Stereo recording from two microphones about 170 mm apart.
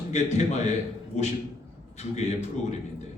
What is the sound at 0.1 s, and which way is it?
A man's voice, 40° left (ahead or behind).